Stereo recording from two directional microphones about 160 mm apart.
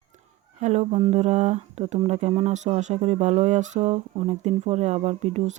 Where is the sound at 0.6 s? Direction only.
45° right (ahead or behind).